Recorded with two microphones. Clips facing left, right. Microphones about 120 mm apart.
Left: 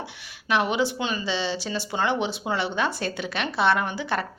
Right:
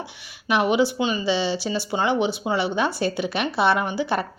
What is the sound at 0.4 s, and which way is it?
Speech, 10° right (ahead or behind).